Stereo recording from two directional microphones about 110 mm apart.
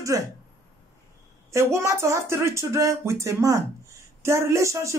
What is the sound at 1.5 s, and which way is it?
Speech, 25° right (ahead or behind).